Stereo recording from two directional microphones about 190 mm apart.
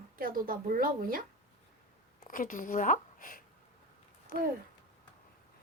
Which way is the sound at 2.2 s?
45° left (ahead or behind).